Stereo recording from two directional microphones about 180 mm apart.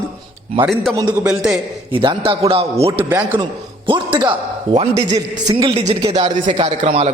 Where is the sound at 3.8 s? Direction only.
25° right (ahead or behind).